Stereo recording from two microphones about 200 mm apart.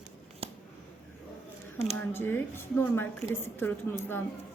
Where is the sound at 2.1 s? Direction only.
10° left (ahead or behind).